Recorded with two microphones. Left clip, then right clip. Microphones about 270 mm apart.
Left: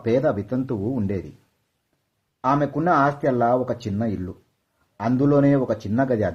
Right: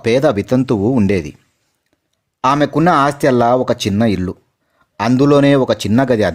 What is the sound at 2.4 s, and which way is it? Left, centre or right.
Speech, right.